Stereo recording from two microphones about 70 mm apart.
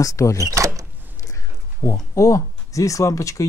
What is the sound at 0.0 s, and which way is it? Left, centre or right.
Speech, left.